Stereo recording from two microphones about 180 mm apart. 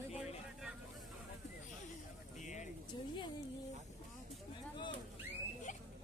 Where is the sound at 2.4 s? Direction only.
40° left (ahead or behind).